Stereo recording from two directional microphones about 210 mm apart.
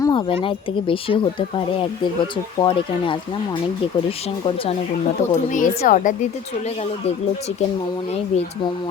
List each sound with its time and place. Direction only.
0.0 s speech: 20° left (ahead or behind)
5.3 s a woman's voice: 35° left (ahead or behind)